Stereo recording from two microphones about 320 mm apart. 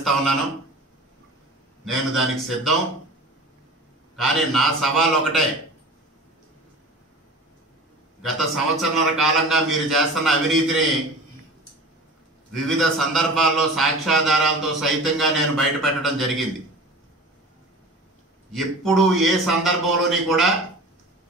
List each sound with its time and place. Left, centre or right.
0.0 s a man's voice: centre
1.9 s a man's voice: centre
4.2 s a man's voice: centre
8.2 s a man's voice: centre
12.5 s a man's voice: centre
18.5 s a man's voice: centre